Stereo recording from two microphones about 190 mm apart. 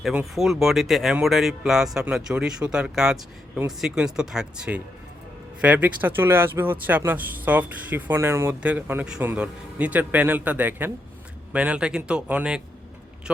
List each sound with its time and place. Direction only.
0.0 s speech: 5° right (ahead or behind)